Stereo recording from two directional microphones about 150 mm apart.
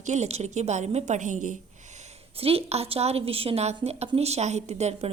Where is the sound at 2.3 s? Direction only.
40° right (ahead or behind).